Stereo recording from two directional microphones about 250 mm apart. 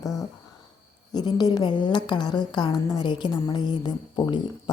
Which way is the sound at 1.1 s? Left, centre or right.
Centre.